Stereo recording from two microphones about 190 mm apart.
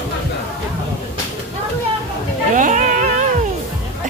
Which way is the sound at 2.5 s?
40° right (ahead or behind).